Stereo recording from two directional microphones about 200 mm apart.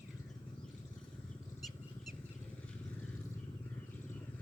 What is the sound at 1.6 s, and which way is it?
Vehicle, centre (ahead or behind).